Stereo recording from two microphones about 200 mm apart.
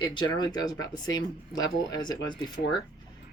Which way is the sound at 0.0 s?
25° left (ahead or behind).